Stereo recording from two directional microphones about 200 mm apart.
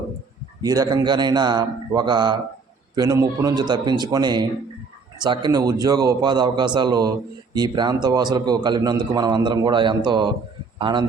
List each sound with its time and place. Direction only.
0.6 s a man's voice: 20° right (ahead or behind)